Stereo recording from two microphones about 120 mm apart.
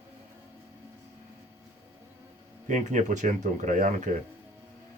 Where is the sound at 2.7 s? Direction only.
90° right.